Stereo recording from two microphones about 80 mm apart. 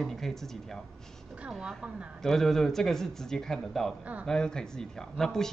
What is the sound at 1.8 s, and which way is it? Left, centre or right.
Speech, centre.